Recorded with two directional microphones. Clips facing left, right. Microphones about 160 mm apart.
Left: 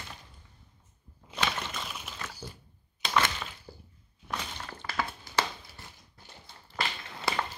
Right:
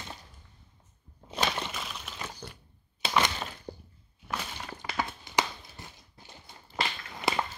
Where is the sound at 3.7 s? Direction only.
45° right (ahead or behind).